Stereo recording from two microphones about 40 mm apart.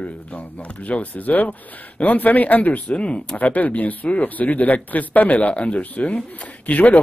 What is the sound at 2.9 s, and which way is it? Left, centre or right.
Speech, left.